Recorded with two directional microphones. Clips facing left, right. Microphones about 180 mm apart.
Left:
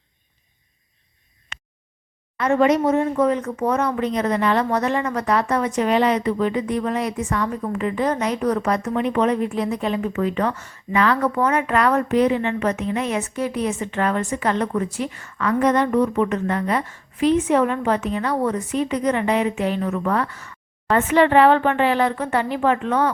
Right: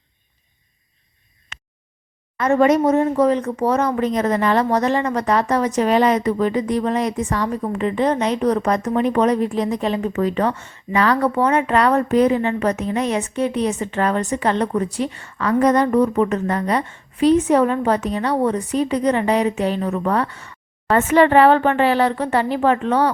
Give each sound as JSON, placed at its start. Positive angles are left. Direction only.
{"t": 2.4, "sound": "speech", "side_deg": -45}
{"t": 20.9, "sound": "speech", "side_deg": -45}